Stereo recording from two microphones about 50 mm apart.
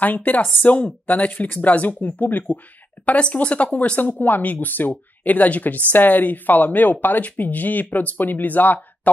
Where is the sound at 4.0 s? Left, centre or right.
Left.